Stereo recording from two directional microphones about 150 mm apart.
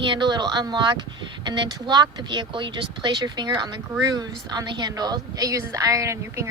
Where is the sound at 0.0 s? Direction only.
30° right (ahead or behind).